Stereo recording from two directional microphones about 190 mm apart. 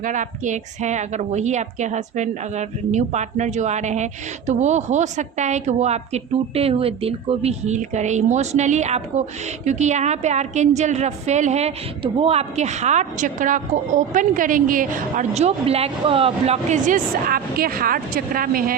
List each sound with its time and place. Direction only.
0.0 s a woman's voice: 40° right (ahead or behind)